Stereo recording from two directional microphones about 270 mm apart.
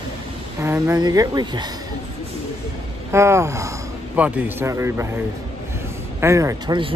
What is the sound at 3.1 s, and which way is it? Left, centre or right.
Speech, centre.